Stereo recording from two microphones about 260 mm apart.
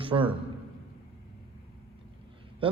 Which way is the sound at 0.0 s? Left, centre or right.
Centre.